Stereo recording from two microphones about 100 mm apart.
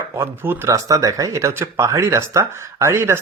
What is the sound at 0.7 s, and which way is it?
Speech, 35° right (ahead or behind).